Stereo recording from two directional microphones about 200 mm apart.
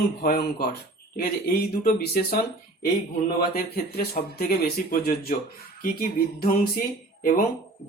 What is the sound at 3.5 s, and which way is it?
Speech, 50° left (ahead or behind).